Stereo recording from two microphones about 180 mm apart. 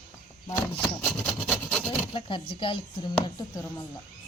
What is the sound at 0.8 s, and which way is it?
Wood, 5° left (ahead or behind).